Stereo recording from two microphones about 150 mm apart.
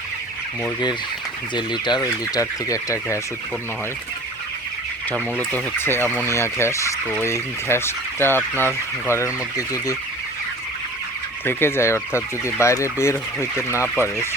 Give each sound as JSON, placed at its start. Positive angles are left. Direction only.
{"t": 1.5, "sound": "speech", "side_deg": 30}
{"t": 5.1, "sound": "speech", "side_deg": 10}
{"t": 11.4, "sound": "speech", "side_deg": 15}